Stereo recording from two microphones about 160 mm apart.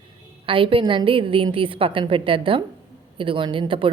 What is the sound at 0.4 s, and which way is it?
A woman's voice, 35° right (ahead or behind).